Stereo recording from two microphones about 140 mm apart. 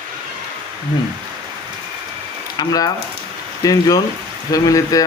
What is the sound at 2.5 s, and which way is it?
Speech, 25° left (ahead or behind).